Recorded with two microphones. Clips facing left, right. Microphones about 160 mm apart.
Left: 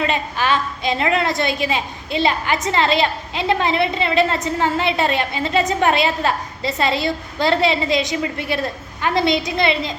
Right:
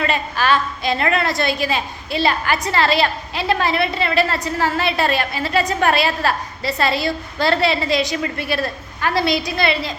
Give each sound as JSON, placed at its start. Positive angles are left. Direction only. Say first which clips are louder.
{"t": 0.0, "sound": "a woman's voice", "louder": "even", "side_deg": 15}